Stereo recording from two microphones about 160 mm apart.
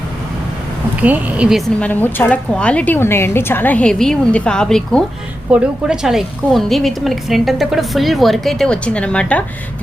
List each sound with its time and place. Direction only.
1.0 s speech: 10° right (ahead or behind)
1.8 s a woman's voice: 10° left (ahead or behind)